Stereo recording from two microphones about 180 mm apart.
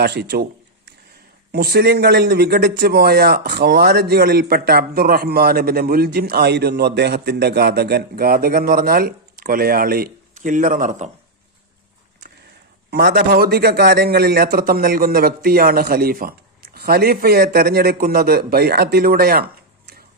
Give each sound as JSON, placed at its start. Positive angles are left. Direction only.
{"t": 0.0, "sound": "speech", "side_deg": -65}
{"t": 1.5, "sound": "speech", "side_deg": -60}
{"t": 12.9, "sound": "speech", "side_deg": -60}